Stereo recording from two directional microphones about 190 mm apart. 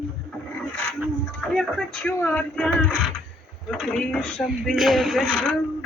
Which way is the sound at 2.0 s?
5° left (ahead or behind).